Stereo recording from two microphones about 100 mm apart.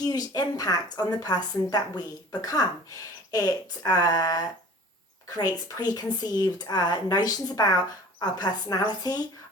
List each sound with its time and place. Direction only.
0.0 s speech: 40° left (ahead or behind)
5.6 s speech: 40° left (ahead or behind)